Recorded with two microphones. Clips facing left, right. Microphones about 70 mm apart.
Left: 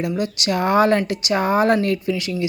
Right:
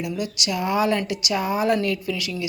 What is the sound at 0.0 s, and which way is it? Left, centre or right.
Speech, left.